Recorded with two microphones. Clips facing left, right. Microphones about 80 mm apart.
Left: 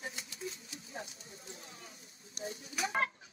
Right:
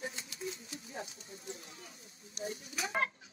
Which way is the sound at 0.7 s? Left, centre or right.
Right.